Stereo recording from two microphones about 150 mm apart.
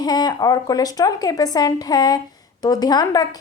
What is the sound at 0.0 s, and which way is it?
A woman's voice, 25° left (ahead or behind).